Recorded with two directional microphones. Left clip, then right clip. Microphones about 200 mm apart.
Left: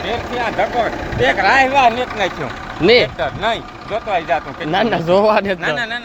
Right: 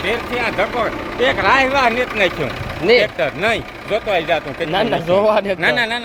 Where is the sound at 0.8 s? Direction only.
30° right (ahead or behind); by 4.6 s 55° right (ahead or behind).